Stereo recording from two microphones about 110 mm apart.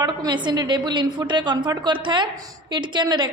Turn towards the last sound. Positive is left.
turn(degrees=-45)  # may be behind; listen again after turning